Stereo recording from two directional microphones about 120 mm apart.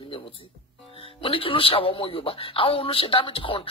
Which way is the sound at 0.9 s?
50° left (ahead or behind).